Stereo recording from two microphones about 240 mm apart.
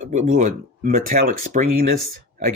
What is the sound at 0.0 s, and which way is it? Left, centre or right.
Speech, right.